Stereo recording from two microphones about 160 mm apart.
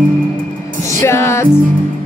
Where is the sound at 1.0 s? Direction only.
15° left (ahead or behind).